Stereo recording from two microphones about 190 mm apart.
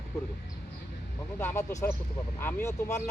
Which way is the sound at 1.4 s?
15° left (ahead or behind).